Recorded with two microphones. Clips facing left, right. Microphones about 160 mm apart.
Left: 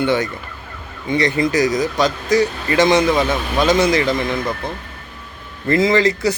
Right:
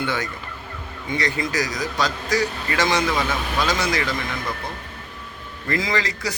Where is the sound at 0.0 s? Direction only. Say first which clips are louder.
Left 8 dB; 20° left (ahead or behind).